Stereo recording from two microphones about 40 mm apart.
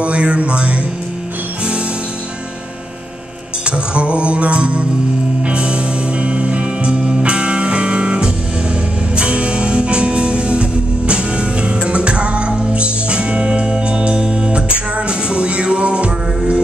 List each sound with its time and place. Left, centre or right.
0.0 s music: right
3.6 s music: right